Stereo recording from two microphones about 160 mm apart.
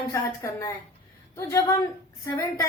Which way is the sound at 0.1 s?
15° left (ahead or behind).